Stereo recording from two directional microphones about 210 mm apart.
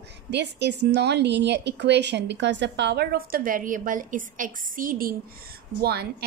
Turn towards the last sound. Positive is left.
turn(degrees=-50)  # may be behind; listen again after turning